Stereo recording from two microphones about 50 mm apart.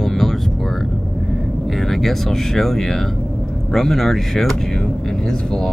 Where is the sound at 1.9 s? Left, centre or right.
Centre.